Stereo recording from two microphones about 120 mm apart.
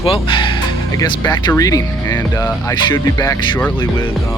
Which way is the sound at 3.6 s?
15° left (ahead or behind).